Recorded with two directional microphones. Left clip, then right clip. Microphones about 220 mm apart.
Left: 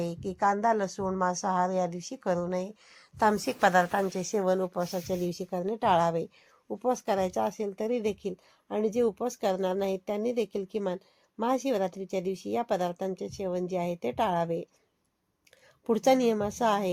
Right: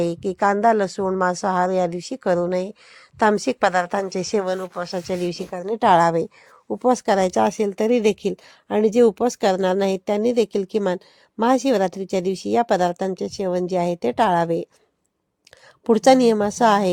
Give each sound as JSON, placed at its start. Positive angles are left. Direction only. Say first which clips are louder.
{"t": 0.0, "sound": "speech", "louder": "right 8 dB", "side_deg": -50}
{"t": 4.3, "sound": "speech", "louder": "right 5 dB", "side_deg": -30}
{"t": 5.6, "sound": "speech", "louder": "right 10 dB", "side_deg": -45}
{"t": 15.9, "sound": "a woman's voice", "louder": "right 10 dB", "side_deg": -40}